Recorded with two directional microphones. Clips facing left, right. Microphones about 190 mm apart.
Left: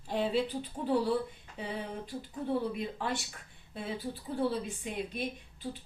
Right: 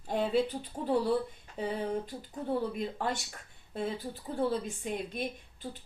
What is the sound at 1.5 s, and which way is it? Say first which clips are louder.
Speech: right 5 dB; 45° right (ahead or behind).